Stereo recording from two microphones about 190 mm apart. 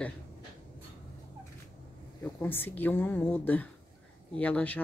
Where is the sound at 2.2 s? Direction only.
10° left (ahead or behind).